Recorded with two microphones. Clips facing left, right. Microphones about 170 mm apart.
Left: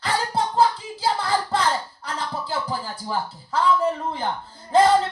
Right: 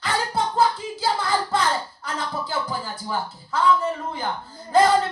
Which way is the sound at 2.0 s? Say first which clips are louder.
Even; 35° left (ahead or behind).